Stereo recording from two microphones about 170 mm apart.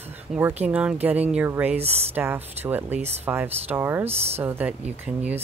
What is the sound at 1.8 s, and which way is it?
Speech, 35° right (ahead or behind).